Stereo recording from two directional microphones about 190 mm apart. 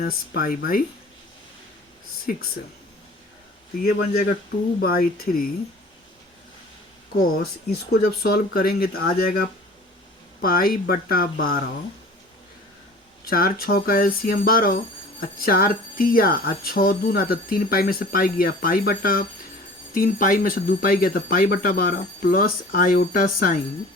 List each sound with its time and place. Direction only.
0.0 s speech: 50° left (ahead or behind)
3.8 s speech: 50° left (ahead or behind)
7.3 s speech: 55° left (ahead or behind)
10.4 s speech: 50° left (ahead or behind)
13.2 s speech: 50° left (ahead or behind)